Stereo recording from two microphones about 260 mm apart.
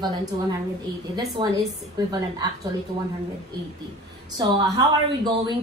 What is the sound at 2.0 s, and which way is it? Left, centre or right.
Speech, centre.